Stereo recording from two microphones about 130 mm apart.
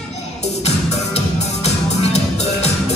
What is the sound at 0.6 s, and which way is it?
Music, 55° left (ahead or behind).